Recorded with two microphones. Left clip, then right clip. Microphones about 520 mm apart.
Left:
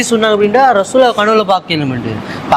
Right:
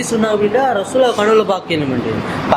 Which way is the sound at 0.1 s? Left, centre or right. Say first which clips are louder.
Left 4 dB; left.